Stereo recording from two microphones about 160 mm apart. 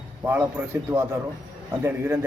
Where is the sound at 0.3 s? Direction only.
10° right (ahead or behind).